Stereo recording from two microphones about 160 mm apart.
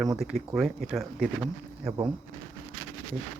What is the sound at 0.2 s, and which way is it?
Speech, centre (ahead or behind).